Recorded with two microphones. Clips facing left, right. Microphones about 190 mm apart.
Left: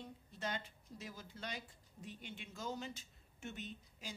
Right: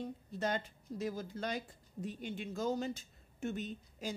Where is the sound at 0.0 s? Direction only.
45° right (ahead or behind).